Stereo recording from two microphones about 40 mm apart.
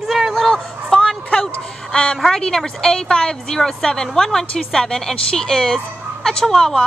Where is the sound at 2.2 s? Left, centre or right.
Centre.